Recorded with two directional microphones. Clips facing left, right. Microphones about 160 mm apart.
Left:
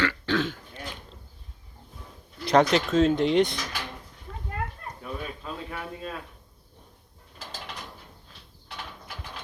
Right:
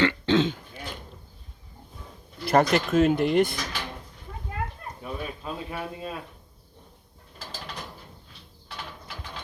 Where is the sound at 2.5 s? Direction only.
5° right (ahead or behind).